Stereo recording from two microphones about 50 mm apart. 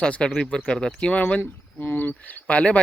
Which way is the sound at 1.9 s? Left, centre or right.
Left.